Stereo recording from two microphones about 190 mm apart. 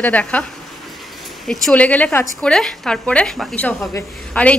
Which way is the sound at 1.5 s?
5° left (ahead or behind).